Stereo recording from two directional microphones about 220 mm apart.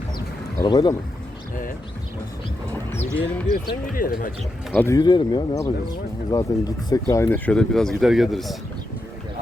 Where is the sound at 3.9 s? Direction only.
40° left (ahead or behind).